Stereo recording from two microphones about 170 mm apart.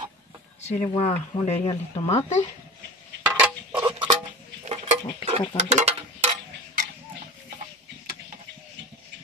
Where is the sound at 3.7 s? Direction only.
25° right (ahead or behind).